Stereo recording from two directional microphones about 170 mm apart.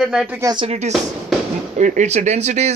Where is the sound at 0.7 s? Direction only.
40° right (ahead or behind).